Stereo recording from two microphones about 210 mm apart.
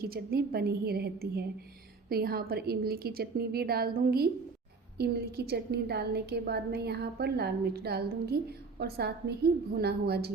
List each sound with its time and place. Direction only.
0.0 s a woman's voice: 45° right (ahead or behind)